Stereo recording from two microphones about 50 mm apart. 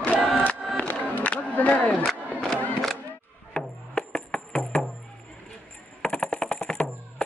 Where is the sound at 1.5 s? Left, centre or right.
Left.